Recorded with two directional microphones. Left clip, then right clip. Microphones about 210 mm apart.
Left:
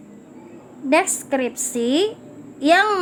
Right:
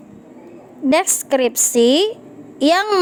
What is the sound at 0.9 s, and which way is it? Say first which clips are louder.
A woman's voice: right 2 dB; 45° right (ahead or behind).